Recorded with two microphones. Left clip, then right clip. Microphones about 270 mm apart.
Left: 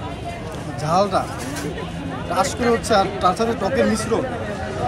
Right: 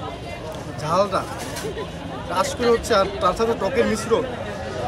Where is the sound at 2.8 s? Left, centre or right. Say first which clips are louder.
Left 2 dB; right.